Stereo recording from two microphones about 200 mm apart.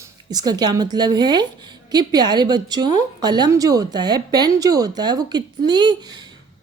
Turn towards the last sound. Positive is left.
turn(degrees=-20)  # may be behind; listen again after turning